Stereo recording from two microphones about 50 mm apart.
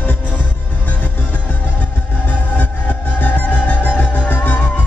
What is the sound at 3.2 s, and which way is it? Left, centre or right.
Music, left.